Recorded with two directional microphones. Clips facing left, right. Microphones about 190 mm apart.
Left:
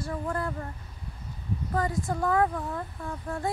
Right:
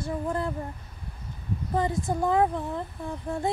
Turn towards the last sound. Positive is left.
turn(degrees=-20)  # may be behind; listen again after turning